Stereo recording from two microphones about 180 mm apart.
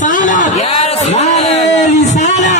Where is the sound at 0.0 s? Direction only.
45° left (ahead or behind).